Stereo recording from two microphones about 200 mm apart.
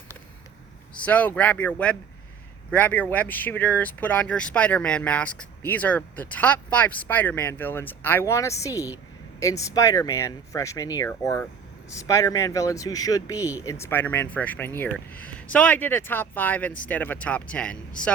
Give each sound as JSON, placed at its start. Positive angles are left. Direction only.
{"t": 0.9, "sound": "speech", "side_deg": 5}